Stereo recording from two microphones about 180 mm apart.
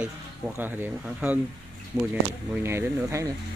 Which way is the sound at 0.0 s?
10° right (ahead or behind).